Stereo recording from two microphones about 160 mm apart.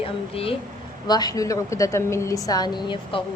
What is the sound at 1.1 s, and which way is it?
A woman's voice, 25° left (ahead or behind).